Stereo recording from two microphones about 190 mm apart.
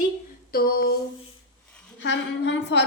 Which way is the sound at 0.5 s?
50° left (ahead or behind).